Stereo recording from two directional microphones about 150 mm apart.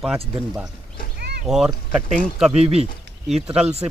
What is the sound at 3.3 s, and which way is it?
Speech, 5° right (ahead or behind).